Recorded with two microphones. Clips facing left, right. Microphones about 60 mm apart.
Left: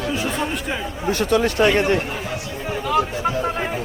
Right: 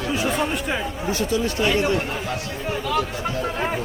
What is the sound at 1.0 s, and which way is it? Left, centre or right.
Speech, left.